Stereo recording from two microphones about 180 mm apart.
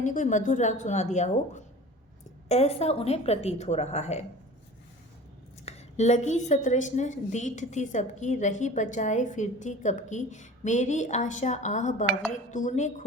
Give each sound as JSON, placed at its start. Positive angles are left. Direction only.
{"t": 0.0, "sound": "a woman's voice", "side_deg": 45}
{"t": 5.6, "sound": "a woman's voice", "side_deg": 35}